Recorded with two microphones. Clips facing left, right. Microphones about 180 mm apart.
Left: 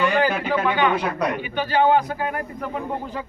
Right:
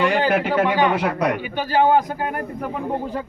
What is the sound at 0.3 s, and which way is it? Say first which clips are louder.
A man's voice: right 3 dB; 80° right.